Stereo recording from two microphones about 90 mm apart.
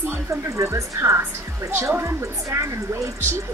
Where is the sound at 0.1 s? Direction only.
30° right (ahead or behind).